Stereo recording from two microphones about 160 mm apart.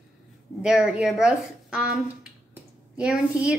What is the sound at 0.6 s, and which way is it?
Speech, 5° right (ahead or behind).